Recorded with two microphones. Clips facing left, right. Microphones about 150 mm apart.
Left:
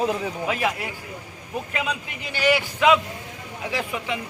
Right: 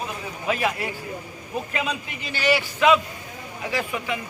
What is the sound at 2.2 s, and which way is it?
A man's voice, 15° left (ahead or behind).